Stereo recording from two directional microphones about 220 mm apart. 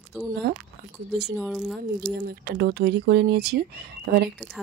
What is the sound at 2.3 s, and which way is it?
Speech, 45° right (ahead or behind).